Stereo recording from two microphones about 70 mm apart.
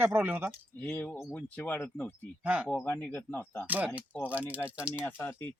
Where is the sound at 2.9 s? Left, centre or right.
Left.